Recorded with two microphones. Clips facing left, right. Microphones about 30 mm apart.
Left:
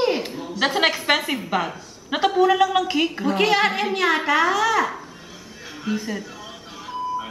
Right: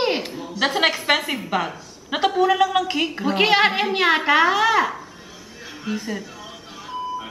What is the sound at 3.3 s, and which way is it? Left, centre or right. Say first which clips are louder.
A woman's voice: right 3 dB; right.